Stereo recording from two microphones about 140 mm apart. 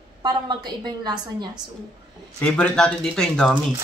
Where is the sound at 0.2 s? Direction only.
30° right (ahead or behind).